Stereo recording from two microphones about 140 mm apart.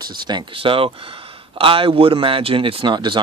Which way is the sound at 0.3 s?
35° right (ahead or behind).